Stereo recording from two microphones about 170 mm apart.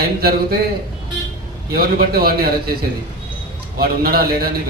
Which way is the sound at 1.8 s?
65° right (ahead or behind).